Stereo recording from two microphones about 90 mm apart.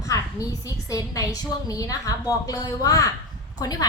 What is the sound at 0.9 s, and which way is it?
A woman's voice, 35° left (ahead or behind).